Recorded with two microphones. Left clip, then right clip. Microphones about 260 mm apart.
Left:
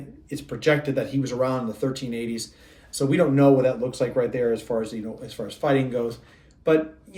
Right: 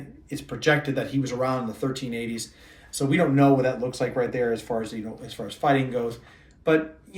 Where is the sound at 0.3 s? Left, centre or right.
Centre.